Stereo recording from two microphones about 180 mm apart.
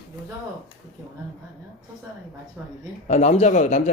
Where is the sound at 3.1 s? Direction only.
35° left (ahead or behind).